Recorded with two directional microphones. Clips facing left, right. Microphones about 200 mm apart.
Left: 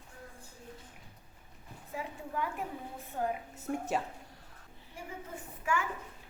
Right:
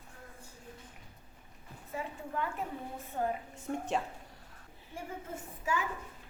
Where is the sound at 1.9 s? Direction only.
Centre (ahead or behind).